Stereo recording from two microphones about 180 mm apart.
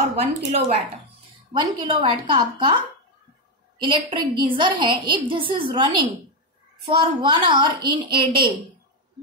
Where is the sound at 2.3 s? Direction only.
25° right (ahead or behind).